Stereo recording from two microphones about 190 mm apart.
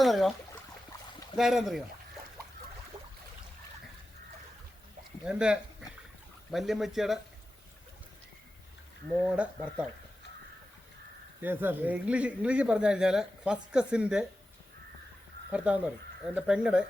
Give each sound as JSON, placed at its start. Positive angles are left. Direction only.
{"t": 0.0, "sound": "a sound", "side_deg": 0}
{"t": 1.4, "sound": "speech", "side_deg": 0}
{"t": 5.2, "sound": "speech", "side_deg": -5}
{"t": 9.2, "sound": "speech", "side_deg": -5}
{"t": 11.4, "sound": "speech", "side_deg": -10}
{"t": 15.5, "sound": "speech", "side_deg": -5}